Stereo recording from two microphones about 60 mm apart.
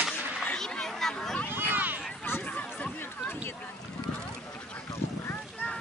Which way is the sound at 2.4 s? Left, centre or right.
Left.